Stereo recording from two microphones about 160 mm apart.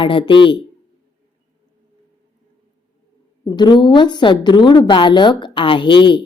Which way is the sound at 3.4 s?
25° left (ahead or behind).